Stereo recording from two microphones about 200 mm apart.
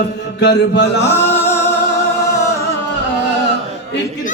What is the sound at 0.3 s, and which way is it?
Mantra, 60° left (ahead or behind).